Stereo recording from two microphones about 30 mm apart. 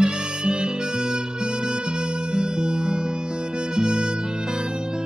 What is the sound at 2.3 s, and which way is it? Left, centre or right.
Music, right.